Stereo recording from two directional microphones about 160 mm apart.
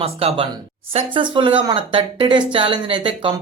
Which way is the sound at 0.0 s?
35° right (ahead or behind).